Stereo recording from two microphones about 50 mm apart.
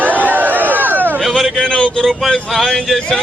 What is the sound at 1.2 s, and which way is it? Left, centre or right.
Speech, centre.